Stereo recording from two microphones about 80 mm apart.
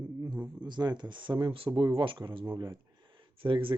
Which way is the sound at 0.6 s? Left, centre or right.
Right.